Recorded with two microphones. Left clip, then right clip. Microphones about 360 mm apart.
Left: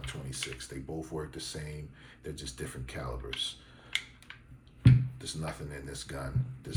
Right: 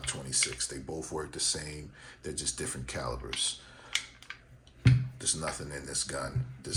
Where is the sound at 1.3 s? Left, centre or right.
Centre.